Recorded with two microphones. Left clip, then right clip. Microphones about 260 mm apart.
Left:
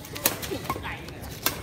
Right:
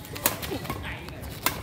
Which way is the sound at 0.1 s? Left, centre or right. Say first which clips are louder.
Left 1 dB; centre.